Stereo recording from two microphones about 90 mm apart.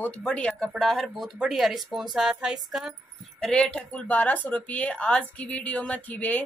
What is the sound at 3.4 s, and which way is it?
A woman's voice, 10° left (ahead or behind).